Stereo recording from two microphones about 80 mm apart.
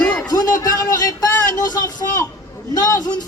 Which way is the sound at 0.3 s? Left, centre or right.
Left.